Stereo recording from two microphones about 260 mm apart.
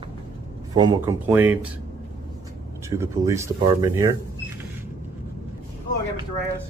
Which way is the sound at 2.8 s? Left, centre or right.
Centre.